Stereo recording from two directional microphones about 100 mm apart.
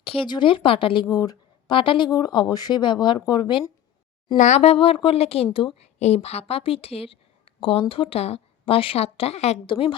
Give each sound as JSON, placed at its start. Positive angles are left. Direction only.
{"t": 0.0, "sound": "a sound", "side_deg": 70}
{"t": 0.3, "sound": "speech", "side_deg": 55}
{"t": 1.1, "sound": "a sound", "side_deg": 40}
{"t": 1.7, "sound": "speech", "side_deg": 60}
{"t": 2.0, "sound": "speech", "side_deg": 40}
{"t": 4.6, "sound": "a woman's voice", "side_deg": 80}
{"t": 5.5, "sound": "a woman's voice", "side_deg": 75}
{"t": 9.6, "sound": "a woman's voice", "side_deg": 70}